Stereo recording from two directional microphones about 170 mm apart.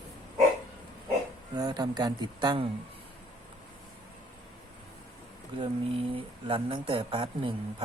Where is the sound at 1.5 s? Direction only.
25° right (ahead or behind).